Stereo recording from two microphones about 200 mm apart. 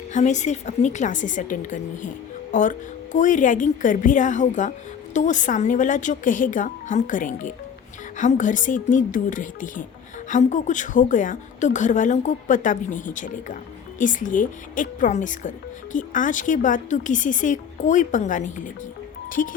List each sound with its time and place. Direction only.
0.1 s a woman's voice: 35° left (ahead or behind)